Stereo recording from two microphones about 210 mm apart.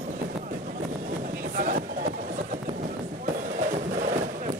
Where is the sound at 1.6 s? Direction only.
40° right (ahead or behind).